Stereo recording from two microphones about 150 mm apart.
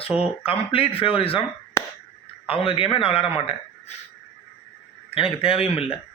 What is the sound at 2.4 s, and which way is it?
Speech, 40° left (ahead or behind).